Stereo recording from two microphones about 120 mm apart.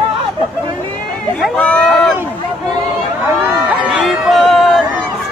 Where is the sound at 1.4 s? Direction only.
5° left (ahead or behind).